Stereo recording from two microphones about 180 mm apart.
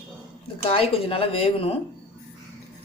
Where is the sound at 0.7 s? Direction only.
30° left (ahead or behind).